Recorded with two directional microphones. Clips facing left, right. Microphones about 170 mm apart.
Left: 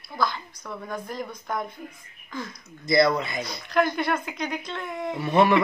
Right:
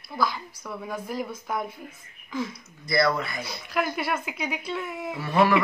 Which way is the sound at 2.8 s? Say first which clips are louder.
Left 3 dB; 20° left (ahead or behind).